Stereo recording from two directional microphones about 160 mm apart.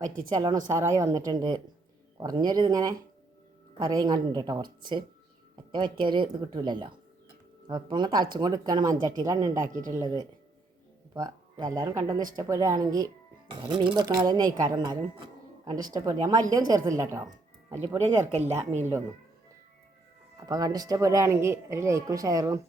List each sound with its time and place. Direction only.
0.0 s speech: 25° right (ahead or behind)
18.0 s speech: 45° right (ahead or behind)
20.5 s speech: 25° right (ahead or behind)